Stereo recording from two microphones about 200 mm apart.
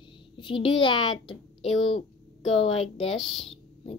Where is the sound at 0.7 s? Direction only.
25° left (ahead or behind).